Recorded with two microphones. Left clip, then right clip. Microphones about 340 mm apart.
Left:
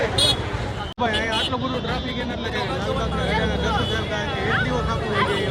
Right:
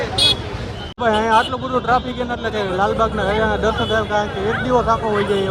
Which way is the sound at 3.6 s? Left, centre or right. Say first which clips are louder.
Right 5 dB; centre.